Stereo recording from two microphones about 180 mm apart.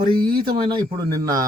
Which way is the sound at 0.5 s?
25° right (ahead or behind).